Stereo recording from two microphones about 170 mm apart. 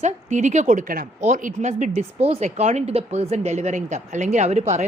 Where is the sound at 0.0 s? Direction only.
45° right (ahead or behind).